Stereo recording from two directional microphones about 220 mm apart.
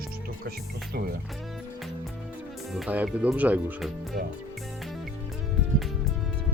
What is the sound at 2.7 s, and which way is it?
Speech, 5° right (ahead or behind).